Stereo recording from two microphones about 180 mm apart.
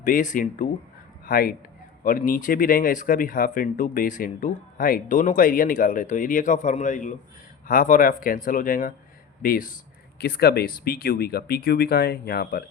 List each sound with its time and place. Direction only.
0.0 s a man's voice: 45° left (ahead or behind)